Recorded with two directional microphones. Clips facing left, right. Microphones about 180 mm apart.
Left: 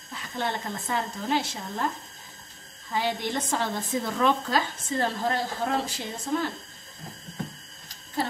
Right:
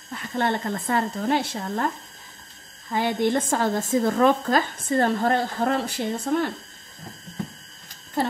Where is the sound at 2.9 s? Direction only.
50° right (ahead or behind).